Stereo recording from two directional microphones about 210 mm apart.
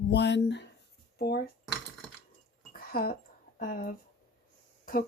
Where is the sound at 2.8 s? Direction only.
45° left (ahead or behind).